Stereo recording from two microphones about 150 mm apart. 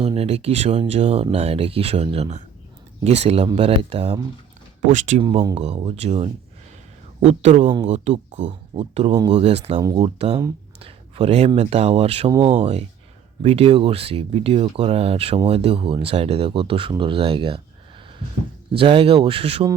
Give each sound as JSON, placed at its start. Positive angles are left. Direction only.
{"t": 0.0, "sound": "speech", "side_deg": -40}
{"t": 4.9, "sound": "speech", "side_deg": -50}
{"t": 5.2, "sound": "speech", "side_deg": -30}
{"t": 5.5, "sound": "speech", "side_deg": -45}
{"t": 13.4, "sound": "speech", "side_deg": -40}
{"t": 18.8, "sound": "speech", "side_deg": -35}